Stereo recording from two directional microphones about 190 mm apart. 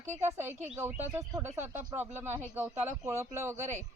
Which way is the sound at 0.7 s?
15° right (ahead or behind).